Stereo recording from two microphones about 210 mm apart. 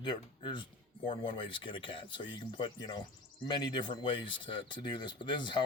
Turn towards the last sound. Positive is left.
turn(degrees=20)  # may be behind; listen again after turning